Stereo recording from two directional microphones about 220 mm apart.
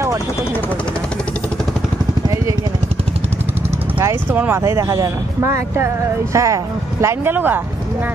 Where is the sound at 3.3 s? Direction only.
30° right (ahead or behind).